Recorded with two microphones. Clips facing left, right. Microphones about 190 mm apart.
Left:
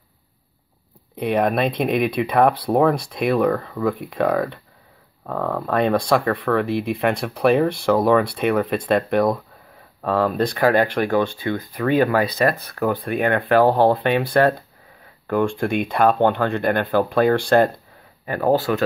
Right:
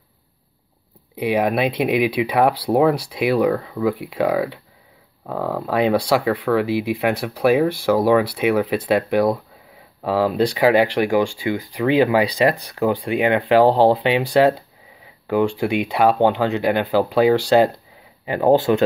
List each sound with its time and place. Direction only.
1.1 s speech: 5° right (ahead or behind); by 18.9 s 25° right (ahead or behind)